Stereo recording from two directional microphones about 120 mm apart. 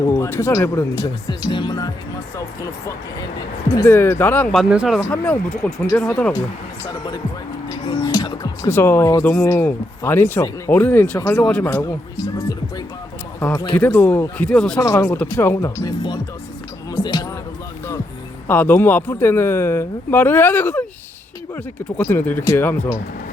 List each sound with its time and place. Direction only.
0.0 s speech: 20° left (ahead or behind)
0.9 s speech: 40° left (ahead or behind); by 4.4 s 15° left (ahead or behind)
4.7 s speech: 10° right (ahead or behind)
5.1 s speech: 10° left (ahead or behind)
6.8 s speech: 35° left (ahead or behind)
7.7 s music: 35° left (ahead or behind)
8.6 s speech: 20° left (ahead or behind)
11.2 s speech: 25° left (ahead or behind)
13.7 s speech: 15° left (ahead or behind)
14.8 s speech: 25° left (ahead or behind)
15.0 s speech: 15° left (ahead or behind); by 16.2 s 35° left (ahead or behind)
16.9 s basketball bounce: 40° left (ahead or behind)
18.4 s speech: 15° left (ahead or behind)
22.0 s speech: 15° left (ahead or behind)